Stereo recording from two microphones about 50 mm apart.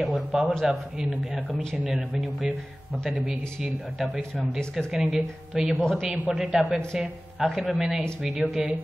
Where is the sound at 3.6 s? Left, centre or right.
Centre.